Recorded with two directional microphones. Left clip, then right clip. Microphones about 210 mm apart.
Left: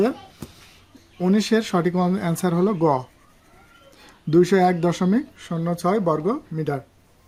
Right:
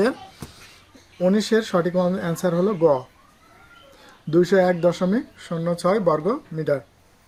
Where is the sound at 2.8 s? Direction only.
60° left (ahead or behind).